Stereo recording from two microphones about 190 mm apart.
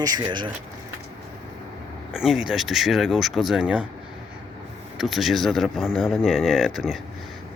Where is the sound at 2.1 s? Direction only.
5° right (ahead or behind).